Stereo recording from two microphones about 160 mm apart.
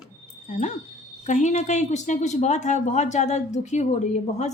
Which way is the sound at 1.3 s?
50° left (ahead or behind).